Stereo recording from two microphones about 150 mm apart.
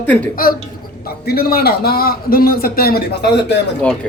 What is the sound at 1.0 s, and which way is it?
A man's voice, 90° left.